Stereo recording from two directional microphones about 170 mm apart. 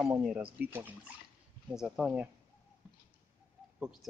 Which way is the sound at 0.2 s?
5° right (ahead or behind).